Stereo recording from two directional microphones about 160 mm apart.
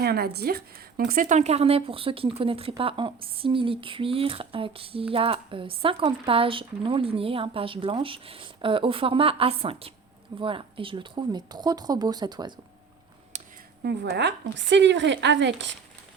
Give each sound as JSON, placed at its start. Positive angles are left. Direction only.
{"t": 0.0, "sound": "a woman's voice", "side_deg": -80}
{"t": 13.3, "sound": "a sound", "side_deg": -50}
{"t": 13.8, "sound": "speech", "side_deg": -90}